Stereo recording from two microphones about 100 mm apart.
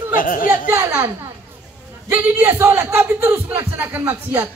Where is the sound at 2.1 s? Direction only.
20° right (ahead or behind).